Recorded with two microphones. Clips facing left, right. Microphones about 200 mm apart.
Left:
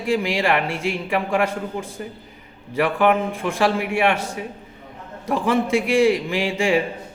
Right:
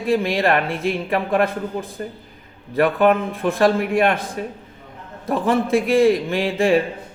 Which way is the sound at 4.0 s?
75° left (ahead or behind).